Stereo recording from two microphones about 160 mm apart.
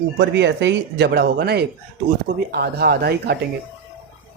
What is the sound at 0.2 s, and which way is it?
Speech, 90° right.